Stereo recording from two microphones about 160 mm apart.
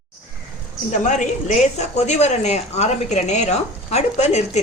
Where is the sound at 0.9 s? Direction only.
50° left (ahead or behind).